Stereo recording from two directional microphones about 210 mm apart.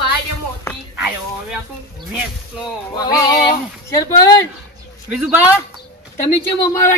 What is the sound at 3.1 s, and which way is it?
Speech, 20° left (ahead or behind).